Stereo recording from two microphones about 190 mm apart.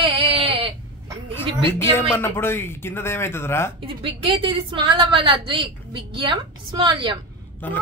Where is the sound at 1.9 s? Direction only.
10° left (ahead or behind).